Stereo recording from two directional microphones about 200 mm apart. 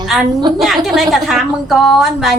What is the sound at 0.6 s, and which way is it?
A woman's voice, centre (ahead or behind).